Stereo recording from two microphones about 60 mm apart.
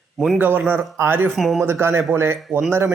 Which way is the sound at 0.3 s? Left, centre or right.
Right.